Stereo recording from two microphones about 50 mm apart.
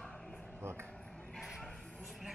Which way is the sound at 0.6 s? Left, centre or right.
Right.